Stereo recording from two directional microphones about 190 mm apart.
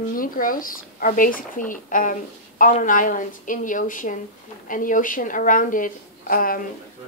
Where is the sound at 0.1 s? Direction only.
45° left (ahead or behind).